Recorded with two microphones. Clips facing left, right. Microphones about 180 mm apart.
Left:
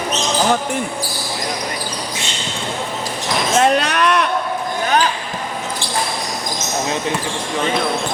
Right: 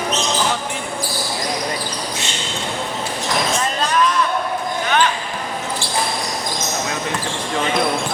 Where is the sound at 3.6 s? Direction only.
70° left (ahead or behind).